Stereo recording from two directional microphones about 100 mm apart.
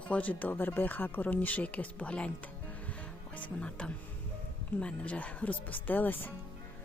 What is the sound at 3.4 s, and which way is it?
Speech, 10° left (ahead or behind).